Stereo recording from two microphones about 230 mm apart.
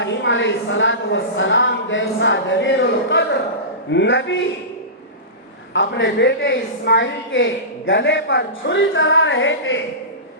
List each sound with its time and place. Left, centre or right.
0.0 s a woman's voice: left
5.7 s a woman's voice: left